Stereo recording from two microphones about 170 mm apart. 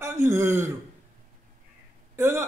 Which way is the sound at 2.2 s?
15° right (ahead or behind).